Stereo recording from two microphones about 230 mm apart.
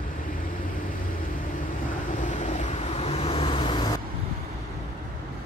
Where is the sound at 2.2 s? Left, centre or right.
Left.